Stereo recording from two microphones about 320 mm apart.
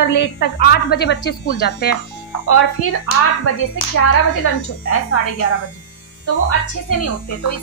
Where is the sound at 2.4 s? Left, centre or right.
Left.